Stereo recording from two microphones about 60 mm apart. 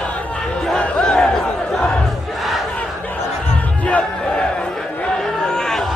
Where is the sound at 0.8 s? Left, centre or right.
Centre.